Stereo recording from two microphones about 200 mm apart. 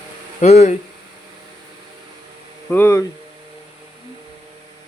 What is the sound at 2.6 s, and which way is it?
Speech, 10° left (ahead or behind).